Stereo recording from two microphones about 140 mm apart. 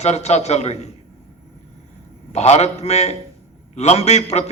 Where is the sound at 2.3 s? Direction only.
50° left (ahead or behind).